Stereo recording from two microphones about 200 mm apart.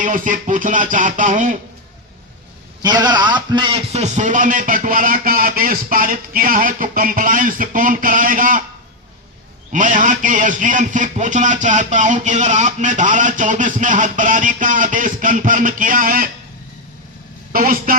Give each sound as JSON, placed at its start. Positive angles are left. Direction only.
{"t": 0.0, "sound": "a man's voice", "side_deg": -40}
{"t": 2.8, "sound": "a man's voice", "side_deg": -20}
{"t": 9.7, "sound": "a man's voice", "side_deg": -40}
{"t": 17.5, "sound": "a man's voice", "side_deg": -45}